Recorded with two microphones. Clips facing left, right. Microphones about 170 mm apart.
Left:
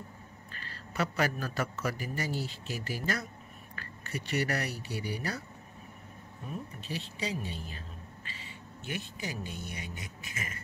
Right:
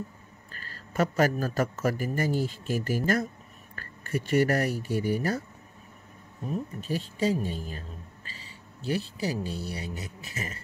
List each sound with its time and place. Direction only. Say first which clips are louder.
0.5 s a man's voice: right 3 dB; 45° right (ahead or behind)
6.4 s a man's voice: right 8 dB; 40° right (ahead or behind)